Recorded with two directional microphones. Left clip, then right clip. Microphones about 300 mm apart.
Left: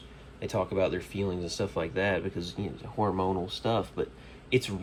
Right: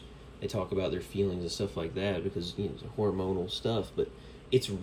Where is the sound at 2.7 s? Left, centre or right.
Centre.